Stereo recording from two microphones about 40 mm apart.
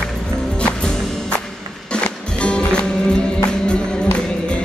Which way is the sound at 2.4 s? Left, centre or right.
Left.